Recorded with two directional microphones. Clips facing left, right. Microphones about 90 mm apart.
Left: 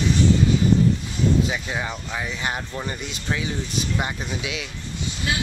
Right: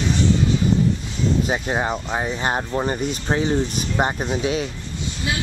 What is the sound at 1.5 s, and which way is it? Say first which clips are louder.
Speech: right 6 dB; 40° right (ahead or behind).